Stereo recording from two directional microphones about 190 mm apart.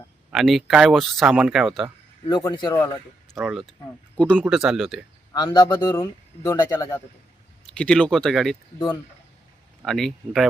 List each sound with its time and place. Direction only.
0.3 s speech: centre (ahead or behind)
2.3 s speech: 20° left (ahead or behind)
3.3 s speech: centre (ahead or behind)
5.3 s speech: 20° left (ahead or behind)
7.7 s speech: 5° left (ahead or behind)
9.8 s speech: centre (ahead or behind)